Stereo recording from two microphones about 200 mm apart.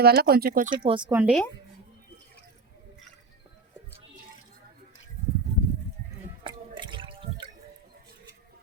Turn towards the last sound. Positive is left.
turn(degrees=-25)  # may be behind; listen again after turning